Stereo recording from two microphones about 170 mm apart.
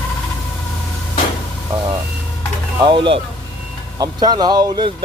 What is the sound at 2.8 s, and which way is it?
Speech, 30° right (ahead or behind).